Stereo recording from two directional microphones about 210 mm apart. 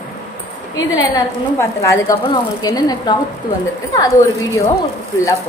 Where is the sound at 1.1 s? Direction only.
15° left (ahead or behind).